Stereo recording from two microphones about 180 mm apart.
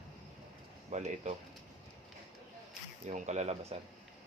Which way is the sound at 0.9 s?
40° right (ahead or behind).